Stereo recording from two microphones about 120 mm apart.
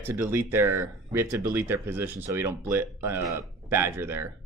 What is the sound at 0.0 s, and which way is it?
Speech, 20° right (ahead or behind).